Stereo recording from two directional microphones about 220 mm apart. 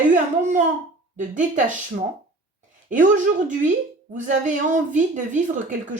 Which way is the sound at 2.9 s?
35° right (ahead or behind).